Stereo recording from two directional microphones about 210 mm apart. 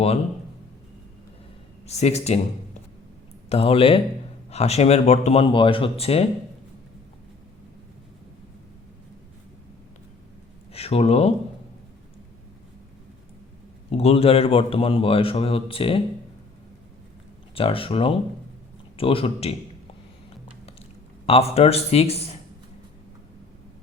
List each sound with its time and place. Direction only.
1.9 s speech: 30° left (ahead or behind)
3.5 s a man's voice: 25° left (ahead or behind)
10.7 s a man's voice: 30° left (ahead or behind)
13.9 s a man's voice: 30° left (ahead or behind)
17.5 s a man's voice: 25° left (ahead or behind)
21.2 s a man's voice: 30° left (ahead or behind)